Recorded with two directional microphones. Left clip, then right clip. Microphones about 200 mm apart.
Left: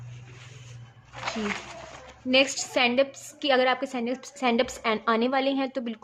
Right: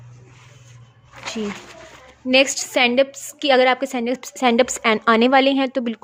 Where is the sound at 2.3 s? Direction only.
40° right (ahead or behind).